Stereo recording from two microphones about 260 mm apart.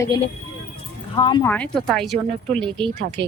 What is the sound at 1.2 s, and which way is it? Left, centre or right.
Speech, centre.